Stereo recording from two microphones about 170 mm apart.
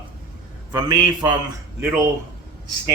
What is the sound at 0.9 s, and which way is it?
Speech, 25° right (ahead or behind).